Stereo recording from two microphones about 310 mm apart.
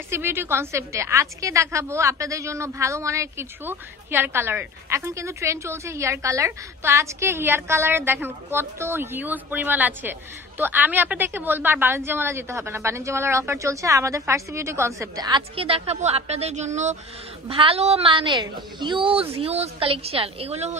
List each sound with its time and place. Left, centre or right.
0.1 s a woman's voice: centre